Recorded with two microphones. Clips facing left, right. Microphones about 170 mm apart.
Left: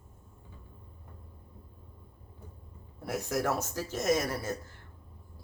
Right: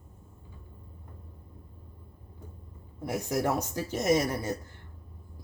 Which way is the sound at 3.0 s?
20° right (ahead or behind).